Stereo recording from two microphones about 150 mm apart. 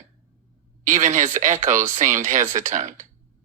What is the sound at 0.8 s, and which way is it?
Speech, 55° right (ahead or behind).